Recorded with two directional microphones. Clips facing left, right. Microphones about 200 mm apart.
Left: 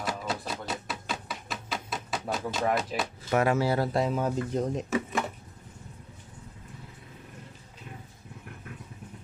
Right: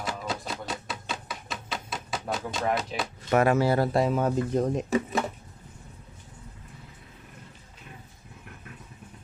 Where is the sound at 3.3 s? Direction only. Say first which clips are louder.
Right 3 dB; 55° right (ahead or behind).